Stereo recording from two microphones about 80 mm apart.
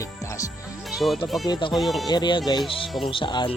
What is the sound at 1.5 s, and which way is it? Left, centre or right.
Speech, left.